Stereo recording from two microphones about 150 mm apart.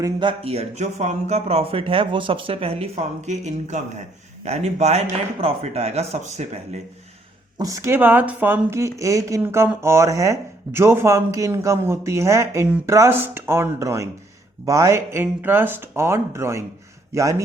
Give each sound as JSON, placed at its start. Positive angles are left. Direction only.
{"t": 0.0, "sound": "speech", "side_deg": -30}
{"t": 7.6, "sound": "speech", "side_deg": -20}